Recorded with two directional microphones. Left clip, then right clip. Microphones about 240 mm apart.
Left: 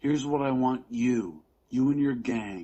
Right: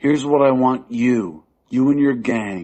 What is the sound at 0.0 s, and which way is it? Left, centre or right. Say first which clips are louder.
A man's voice: right 13 dB; right.